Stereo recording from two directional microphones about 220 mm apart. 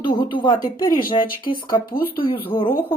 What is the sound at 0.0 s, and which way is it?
Speech, 20° left (ahead or behind).